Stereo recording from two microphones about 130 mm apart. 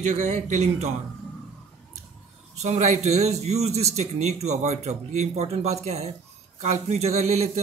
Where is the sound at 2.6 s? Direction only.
60° right (ahead or behind).